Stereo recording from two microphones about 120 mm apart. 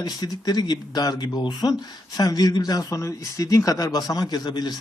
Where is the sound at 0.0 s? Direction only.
35° left (ahead or behind).